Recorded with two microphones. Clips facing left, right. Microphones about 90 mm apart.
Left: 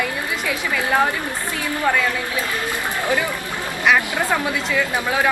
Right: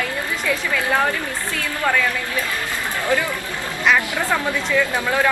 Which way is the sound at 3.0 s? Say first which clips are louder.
Right 2 dB; 15° left (ahead or behind).